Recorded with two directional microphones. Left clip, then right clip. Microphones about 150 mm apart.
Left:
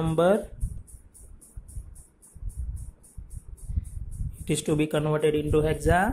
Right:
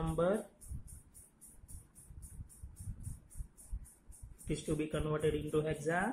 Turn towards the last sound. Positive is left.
turn(degrees=50)  # may be behind; listen again after turning